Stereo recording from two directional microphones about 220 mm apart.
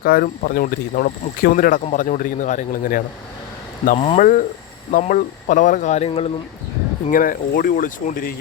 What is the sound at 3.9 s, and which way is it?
Speech, 25° left (ahead or behind).